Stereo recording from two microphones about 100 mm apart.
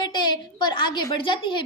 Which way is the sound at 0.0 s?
50° left (ahead or behind).